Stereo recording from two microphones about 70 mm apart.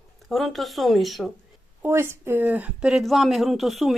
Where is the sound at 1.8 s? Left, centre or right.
Right.